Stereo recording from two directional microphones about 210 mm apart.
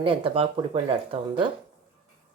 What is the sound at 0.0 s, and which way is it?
Speech, 25° right (ahead or behind).